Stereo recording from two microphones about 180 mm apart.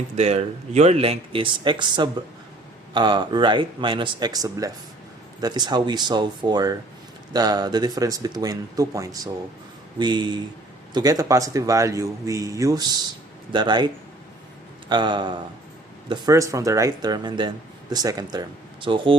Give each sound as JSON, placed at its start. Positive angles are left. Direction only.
{"t": 0.2, "sound": "a man's voice", "side_deg": -40}